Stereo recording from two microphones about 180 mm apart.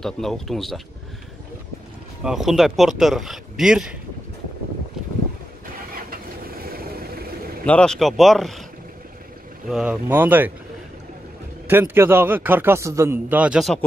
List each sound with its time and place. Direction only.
0.0 s speech: centre (ahead or behind)
2.2 s speech: centre (ahead or behind)
6.0 s a sound: 55° right (ahead or behind)
7.6 s speech: 5° left (ahead or behind)
9.7 s a man's voice: 5° right (ahead or behind)
11.7 s a man's voice: 10° right (ahead or behind)